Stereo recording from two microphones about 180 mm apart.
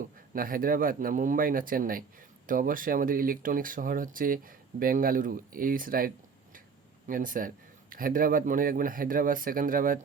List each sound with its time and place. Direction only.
0.3 s speech: 50° right (ahead or behind)
7.1 s speech: 50° right (ahead or behind)